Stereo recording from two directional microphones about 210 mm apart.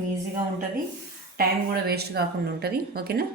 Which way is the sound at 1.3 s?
45° right (ahead or behind).